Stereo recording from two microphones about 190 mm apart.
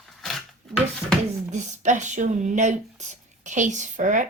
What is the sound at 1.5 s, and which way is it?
Speech, 40° right (ahead or behind).